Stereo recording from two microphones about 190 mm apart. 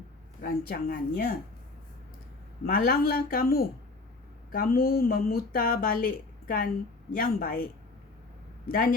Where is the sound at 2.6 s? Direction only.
50° left (ahead or behind).